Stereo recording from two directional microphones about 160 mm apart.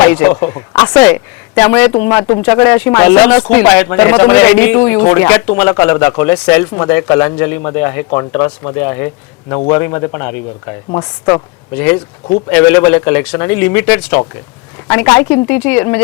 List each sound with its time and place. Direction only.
0.0 s speech: 10° left (ahead or behind)